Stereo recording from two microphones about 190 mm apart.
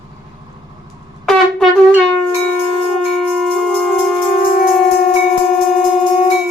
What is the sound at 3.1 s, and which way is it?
Shofar, centre (ahead or behind).